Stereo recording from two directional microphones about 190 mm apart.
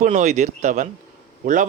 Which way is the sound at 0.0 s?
40° right (ahead or behind).